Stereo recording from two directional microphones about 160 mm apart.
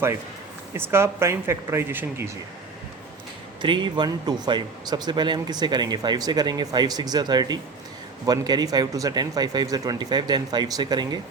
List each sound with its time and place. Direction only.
0.7 s speech: 15° right (ahead or behind)
3.6 s speech: 30° right (ahead or behind)